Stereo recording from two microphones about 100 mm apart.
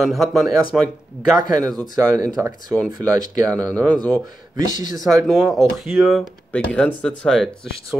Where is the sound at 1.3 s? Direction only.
40° right (ahead or behind).